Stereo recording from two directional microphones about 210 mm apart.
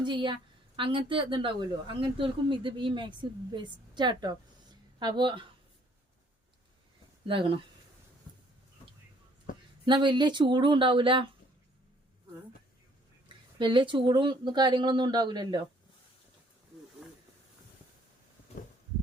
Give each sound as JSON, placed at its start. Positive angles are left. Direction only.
{"t": 0.0, "sound": "a woman's voice", "side_deg": -20}
{"t": 7.3, "sound": "a woman's voice", "side_deg": -25}
{"t": 9.8, "sound": "a woman's voice", "side_deg": -20}
{"t": 13.2, "sound": "a woman's voice", "side_deg": -20}
{"t": 17.0, "sound": "a sound", "side_deg": -5}